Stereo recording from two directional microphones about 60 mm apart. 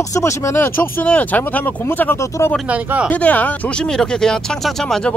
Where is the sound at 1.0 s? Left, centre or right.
Left.